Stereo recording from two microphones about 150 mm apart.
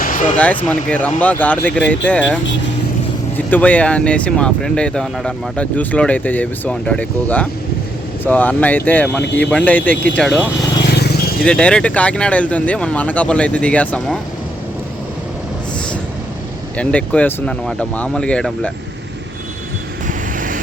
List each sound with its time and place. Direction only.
0.0 s a sound: 65° left (ahead or behind)
0.3 s speech: 10° left (ahead or behind)
10.9 s vehicle: 90° left
11.4 s speech: 5° left (ahead or behind)
16.7 s speech: 10° left (ahead or behind)
20.1 s vehicle: 65° right (ahead or behind)